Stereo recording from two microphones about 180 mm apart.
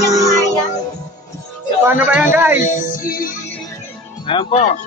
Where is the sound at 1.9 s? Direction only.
10° right (ahead or behind).